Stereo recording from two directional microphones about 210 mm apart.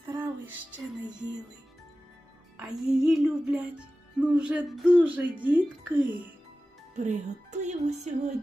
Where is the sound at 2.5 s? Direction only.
5° right (ahead or behind).